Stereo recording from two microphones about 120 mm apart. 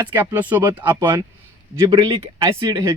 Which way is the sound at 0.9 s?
40° right (ahead or behind).